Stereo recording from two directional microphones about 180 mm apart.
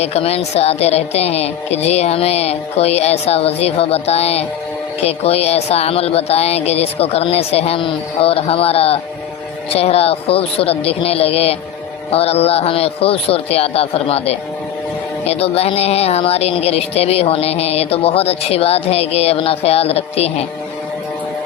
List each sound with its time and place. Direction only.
0.0 s speech: 35° left (ahead or behind)